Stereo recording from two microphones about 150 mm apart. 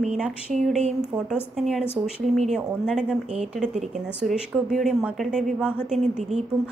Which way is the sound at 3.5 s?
5° right (ahead or behind).